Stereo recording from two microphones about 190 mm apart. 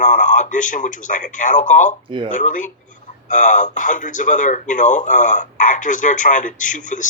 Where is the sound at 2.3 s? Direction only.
40° left (ahead or behind).